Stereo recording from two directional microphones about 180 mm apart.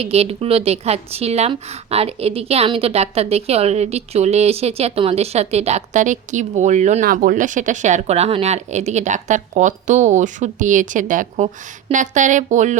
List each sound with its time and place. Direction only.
0.0 s a woman's voice: 35° right (ahead or behind)